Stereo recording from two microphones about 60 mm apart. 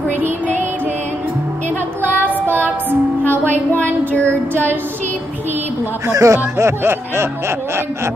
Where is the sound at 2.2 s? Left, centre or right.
Right.